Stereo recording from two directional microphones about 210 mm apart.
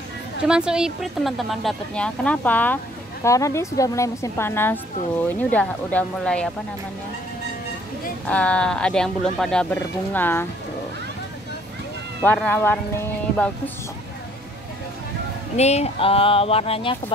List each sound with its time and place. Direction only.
0.5 s a woman's voice: 5° right (ahead or behind)
8.3 s speech: 5° left (ahead or behind)
12.2 s a woman's voice: 10° left (ahead or behind)
15.5 s speech: 30° left (ahead or behind)